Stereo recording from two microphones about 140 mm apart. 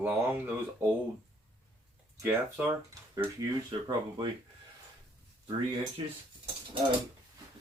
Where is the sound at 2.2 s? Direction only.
15° right (ahead or behind).